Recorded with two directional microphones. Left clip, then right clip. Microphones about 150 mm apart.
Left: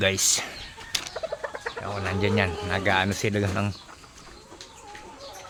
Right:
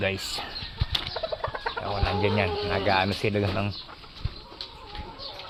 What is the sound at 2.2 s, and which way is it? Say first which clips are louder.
Speech: left 2 dB; 30° left (ahead or behind).